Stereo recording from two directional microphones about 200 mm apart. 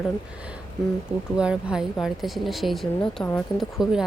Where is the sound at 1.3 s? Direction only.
5° right (ahead or behind).